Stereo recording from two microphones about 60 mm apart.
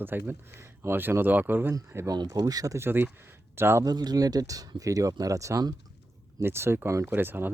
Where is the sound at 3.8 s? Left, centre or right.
Right.